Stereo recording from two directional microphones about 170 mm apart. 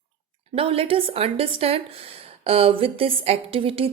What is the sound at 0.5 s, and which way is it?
Speech, 35° right (ahead or behind).